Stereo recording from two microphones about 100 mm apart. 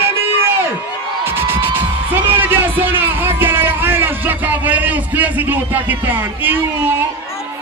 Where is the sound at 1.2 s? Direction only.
25° right (ahead or behind).